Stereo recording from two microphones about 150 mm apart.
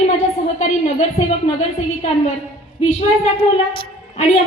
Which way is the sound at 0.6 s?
50° left (ahead or behind).